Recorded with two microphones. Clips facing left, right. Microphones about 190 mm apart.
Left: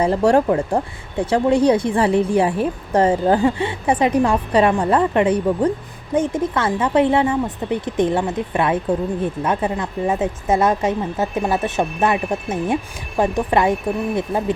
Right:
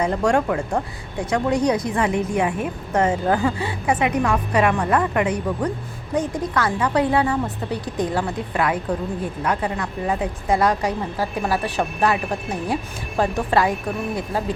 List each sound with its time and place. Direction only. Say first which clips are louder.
0.0 s a woman's voice: left 4 dB; 30° left (ahead or behind)